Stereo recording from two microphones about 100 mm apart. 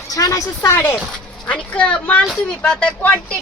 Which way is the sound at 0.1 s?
35° left (ahead or behind).